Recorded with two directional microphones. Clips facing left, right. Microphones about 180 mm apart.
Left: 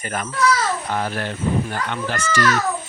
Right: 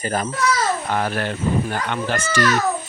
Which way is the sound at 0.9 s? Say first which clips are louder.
Right 2 dB; 65° right (ahead or behind).